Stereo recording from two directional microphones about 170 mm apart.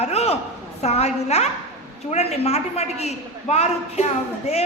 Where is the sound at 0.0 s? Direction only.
40° left (ahead or behind).